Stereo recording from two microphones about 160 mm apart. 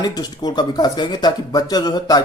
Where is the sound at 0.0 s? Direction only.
25° left (ahead or behind).